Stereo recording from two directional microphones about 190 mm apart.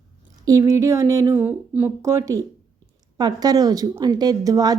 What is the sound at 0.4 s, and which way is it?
A woman's voice, 15° right (ahead or behind).